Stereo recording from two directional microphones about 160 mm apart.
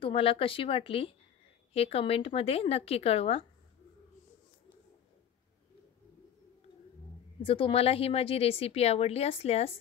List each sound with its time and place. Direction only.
0.0 s speech: 35° left (ahead or behind)
7.4 s speech: 35° left (ahead or behind)